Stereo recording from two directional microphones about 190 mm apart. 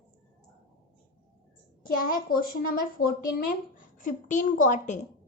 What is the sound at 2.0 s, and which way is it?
Speech, 45° left (ahead or behind).